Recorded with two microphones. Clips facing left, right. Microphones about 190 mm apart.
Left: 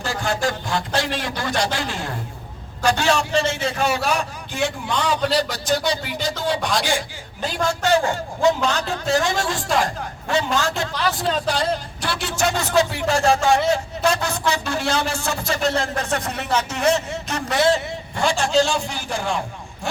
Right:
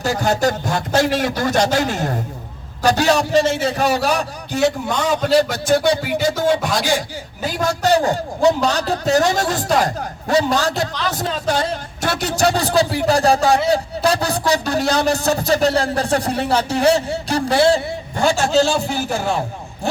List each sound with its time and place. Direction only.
0.0 s speech: 40° right (ahead or behind); by 6.1 s 55° right (ahead or behind)
7.6 s speech: 40° right (ahead or behind)
18.5 s speech: 5° right (ahead or behind)